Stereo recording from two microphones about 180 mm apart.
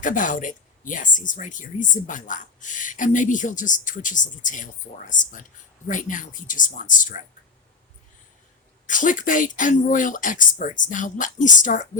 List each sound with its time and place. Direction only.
0.0 s speech: 45° left (ahead or behind)
8.9 s speech: 45° left (ahead or behind)